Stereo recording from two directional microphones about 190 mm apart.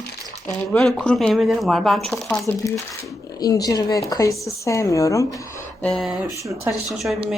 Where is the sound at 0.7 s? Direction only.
5° left (ahead or behind).